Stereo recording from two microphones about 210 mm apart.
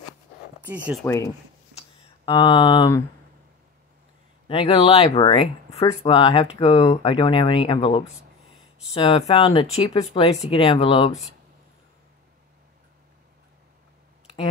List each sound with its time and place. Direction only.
0.6 s speech: 5° right (ahead or behind)
1.0 s speech: 15° left (ahead or behind)
1.8 s a sound: 25° left (ahead or behind)
4.5 s speech: 25° left (ahead or behind)